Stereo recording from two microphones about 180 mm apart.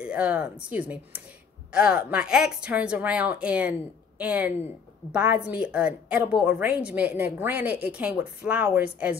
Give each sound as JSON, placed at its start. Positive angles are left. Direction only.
{"t": 0.0, "sound": "a woman's voice", "side_deg": -5}